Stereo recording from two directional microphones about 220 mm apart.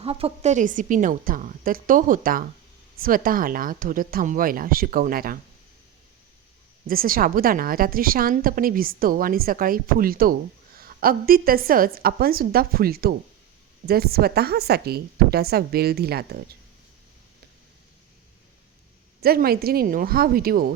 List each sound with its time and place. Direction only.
0.0 s a woman's voice: 25° right (ahead or behind); by 5.4 s 40° right (ahead or behind)
6.8 s a woman's voice: 40° right (ahead or behind)
19.2 s a woman's voice: 45° right (ahead or behind)